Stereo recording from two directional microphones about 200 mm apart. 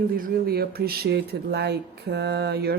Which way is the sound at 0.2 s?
50° right (ahead or behind).